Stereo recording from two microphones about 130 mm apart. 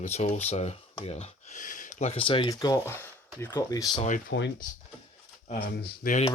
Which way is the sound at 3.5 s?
30° left (ahead or behind).